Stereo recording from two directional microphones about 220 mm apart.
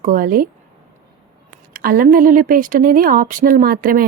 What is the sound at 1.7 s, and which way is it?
A woman's voice, 40° right (ahead or behind).